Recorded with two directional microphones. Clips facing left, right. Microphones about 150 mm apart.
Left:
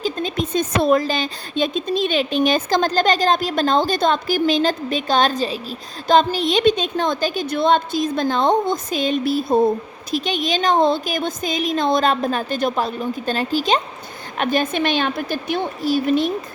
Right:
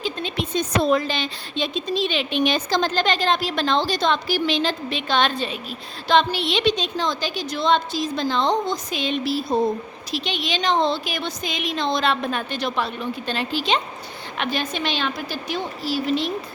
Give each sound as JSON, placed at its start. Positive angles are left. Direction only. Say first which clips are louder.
{"t": 0.0, "sound": "speech", "louder": "left 4 dB", "side_deg": 40}